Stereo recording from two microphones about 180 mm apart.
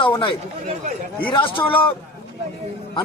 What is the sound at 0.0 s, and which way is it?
Speech, 25° left (ahead or behind).